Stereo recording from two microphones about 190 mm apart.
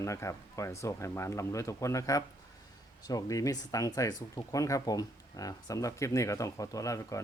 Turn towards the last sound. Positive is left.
turn(degrees=15)  # may be behind; listen again after turning